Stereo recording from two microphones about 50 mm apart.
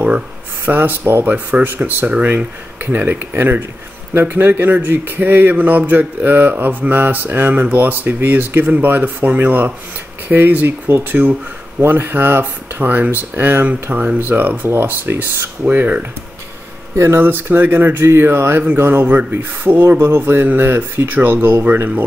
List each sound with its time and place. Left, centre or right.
0.7 s speech: right
16.9 s speech: right
17.3 s speech: right
19.0 s speech: right